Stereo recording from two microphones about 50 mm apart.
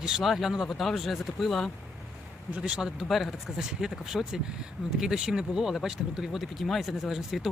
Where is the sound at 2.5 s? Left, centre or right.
Right.